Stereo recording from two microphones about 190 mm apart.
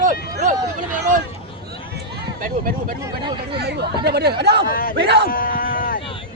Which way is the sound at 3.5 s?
60° right (ahead or behind).